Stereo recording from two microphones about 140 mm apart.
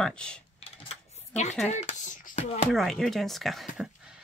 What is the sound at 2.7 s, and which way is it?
Speech, centre (ahead or behind).